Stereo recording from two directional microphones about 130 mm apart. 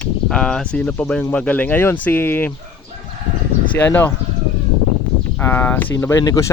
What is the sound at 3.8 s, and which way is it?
Speech, 15° left (ahead or behind).